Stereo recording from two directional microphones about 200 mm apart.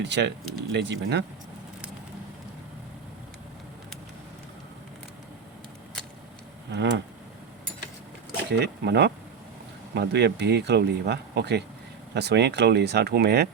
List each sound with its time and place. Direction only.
0.0 s speech: 60° right (ahead or behind)
6.7 s speech: 60° right (ahead or behind)
8.4 s speech: 55° right (ahead or behind)